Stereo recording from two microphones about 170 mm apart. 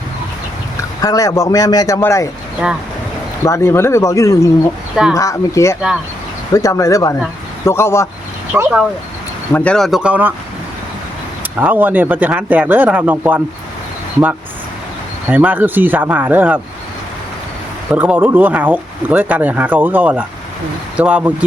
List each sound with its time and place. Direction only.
1.0 s a man's voice: 20° left (ahead or behind)
3.4 s a man's voice: 15° left (ahead or behind)
8.5 s speech: 5° right (ahead or behind)
9.5 s speech: 10° left (ahead or behind); by 10.3 s 10° right (ahead or behind)
11.5 s speech: 10° right (ahead or behind)
15.3 s speech: 10° right (ahead or behind)
17.9 s speech: 10° right (ahead or behind)